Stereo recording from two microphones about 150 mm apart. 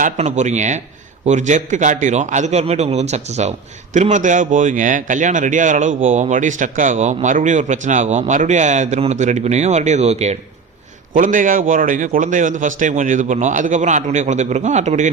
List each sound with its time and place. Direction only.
0.0 s a man's voice: 50° right (ahead or behind)
11.1 s a man's voice: 60° right (ahead or behind)